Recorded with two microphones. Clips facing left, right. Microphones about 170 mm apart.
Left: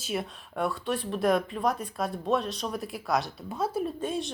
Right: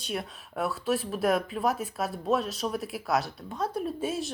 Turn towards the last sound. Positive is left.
turn(degrees=-5)  # may be behind; listen again after turning